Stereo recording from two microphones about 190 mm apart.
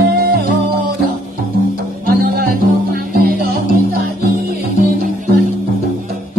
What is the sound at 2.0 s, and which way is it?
Music, 50° right (ahead or behind).